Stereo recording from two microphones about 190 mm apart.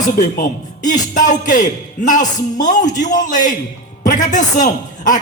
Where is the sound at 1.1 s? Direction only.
45° left (ahead or behind).